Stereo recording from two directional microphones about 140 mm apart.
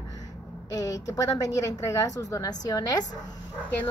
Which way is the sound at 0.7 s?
25° left (ahead or behind).